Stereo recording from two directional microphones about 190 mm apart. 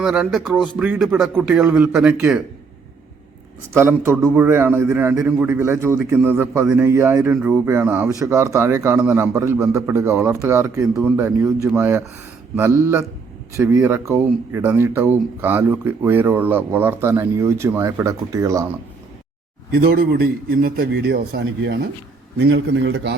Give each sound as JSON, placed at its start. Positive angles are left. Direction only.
{"t": 0.0, "sound": "a man's voice", "side_deg": -5}
{"t": 3.7, "sound": "speech", "side_deg": -15}
{"t": 19.7, "sound": "a man's voice", "side_deg": -55}